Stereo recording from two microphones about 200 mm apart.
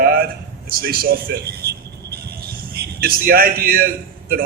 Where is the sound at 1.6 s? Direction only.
55° right (ahead or behind).